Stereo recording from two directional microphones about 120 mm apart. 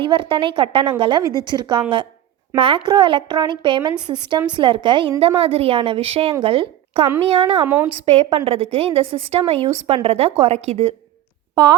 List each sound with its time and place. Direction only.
0.0 s a woman's voice: 45° right (ahead or behind)
5.4 s a woman's voice: 55° right (ahead or behind)
7.6 s a woman's voice: 15° right (ahead or behind)
7.9 s a woman's voice: 50° right (ahead or behind)